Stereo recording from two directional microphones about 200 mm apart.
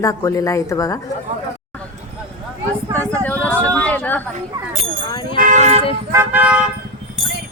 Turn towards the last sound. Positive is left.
turn(degrees=-10)  # may be behind; listen again after turning